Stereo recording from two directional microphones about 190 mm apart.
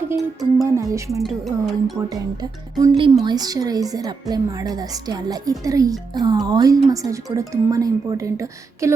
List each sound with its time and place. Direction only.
0.6 s speech: 15° right (ahead or behind)
1.2 s speech: centre (ahead or behind)
2.0 s a woman's voice: 20° right (ahead or behind)